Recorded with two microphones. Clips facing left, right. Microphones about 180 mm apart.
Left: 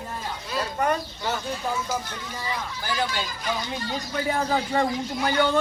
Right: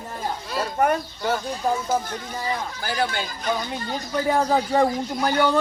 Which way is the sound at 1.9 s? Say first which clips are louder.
Right 5 dB; 45° right (ahead or behind).